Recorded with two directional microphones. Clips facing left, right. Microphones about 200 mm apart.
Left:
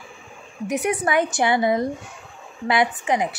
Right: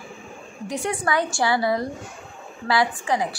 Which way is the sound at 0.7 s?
20° left (ahead or behind).